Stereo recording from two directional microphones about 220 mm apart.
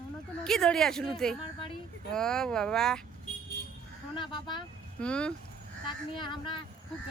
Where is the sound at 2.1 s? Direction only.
Centre (ahead or behind).